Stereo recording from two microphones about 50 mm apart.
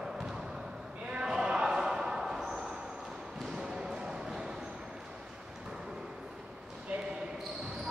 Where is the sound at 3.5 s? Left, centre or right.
Centre.